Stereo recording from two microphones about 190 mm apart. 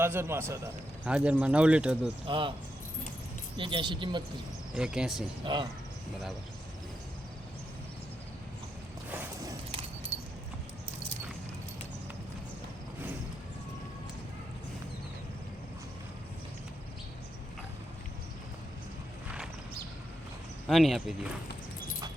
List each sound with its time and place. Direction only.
0.0 s a man's voice: 10° right (ahead or behind)
2.2 s speech: 25° right (ahead or behind)
3.6 s speech: 25° right (ahead or behind)
4.7 s speech: 5° right (ahead or behind)
5.5 s speech: 25° right (ahead or behind)
9.0 s mechanisms: 10° right (ahead or behind)
10.1 s keys jangling: 35° right (ahead or behind)
20.7 s speech: centre (ahead or behind)